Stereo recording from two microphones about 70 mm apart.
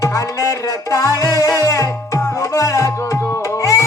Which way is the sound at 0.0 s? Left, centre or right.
Left.